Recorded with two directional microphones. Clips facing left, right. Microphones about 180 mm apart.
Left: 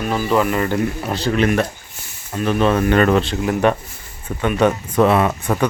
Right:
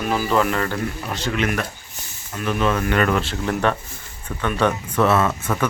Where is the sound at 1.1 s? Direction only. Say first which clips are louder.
Left 6 dB; 35° left (ahead or behind).